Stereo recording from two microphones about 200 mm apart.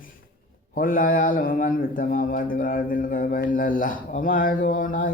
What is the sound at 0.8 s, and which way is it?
Speech, 45° left (ahead or behind).